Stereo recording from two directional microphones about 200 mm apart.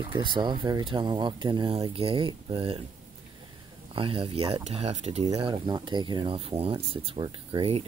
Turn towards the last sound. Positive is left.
turn(degrees=-25)  # may be behind; listen again after turning